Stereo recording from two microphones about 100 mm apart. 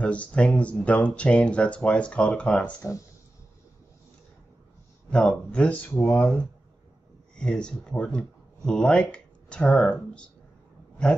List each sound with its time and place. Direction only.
0.0 s speech: 15° left (ahead or behind)
5.1 s speech: 10° left (ahead or behind)